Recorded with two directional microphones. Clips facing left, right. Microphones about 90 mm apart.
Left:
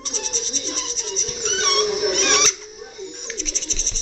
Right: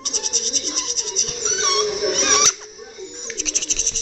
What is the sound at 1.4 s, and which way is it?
Dog, 20° right (ahead or behind).